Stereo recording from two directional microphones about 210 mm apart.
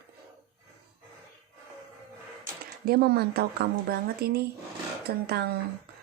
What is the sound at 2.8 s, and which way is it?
Speech, 50° right (ahead or behind).